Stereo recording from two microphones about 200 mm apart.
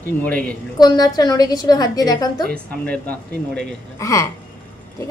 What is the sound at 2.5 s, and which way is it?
Speech, 5° left (ahead or behind).